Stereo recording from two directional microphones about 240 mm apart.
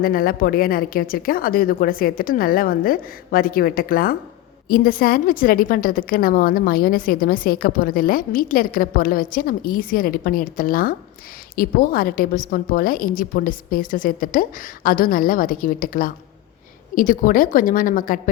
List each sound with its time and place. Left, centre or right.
0.0 s a woman's voice: left